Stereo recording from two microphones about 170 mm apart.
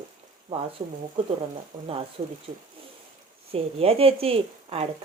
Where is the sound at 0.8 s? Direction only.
35° right (ahead or behind).